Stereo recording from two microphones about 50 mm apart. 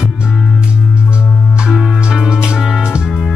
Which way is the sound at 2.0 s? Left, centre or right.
Centre.